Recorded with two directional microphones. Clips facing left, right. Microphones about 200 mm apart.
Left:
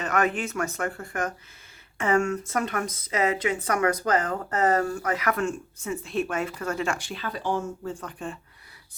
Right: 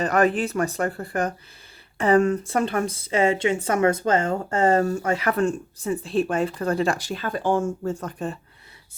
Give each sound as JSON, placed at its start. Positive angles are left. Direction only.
{"t": 0.0, "sound": "a woman's voice", "side_deg": -35}